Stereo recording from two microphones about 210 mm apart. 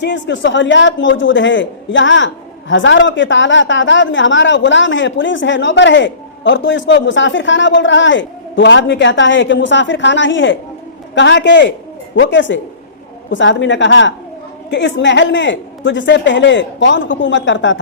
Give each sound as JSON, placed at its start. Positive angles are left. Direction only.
{"t": 0.0, "sound": "a man's voice", "side_deg": 60}